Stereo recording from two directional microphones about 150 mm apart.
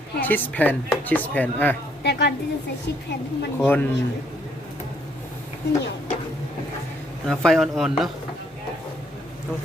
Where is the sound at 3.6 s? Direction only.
15° left (ahead or behind).